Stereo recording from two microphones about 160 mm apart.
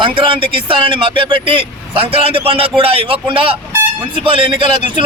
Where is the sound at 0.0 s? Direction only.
30° right (ahead or behind).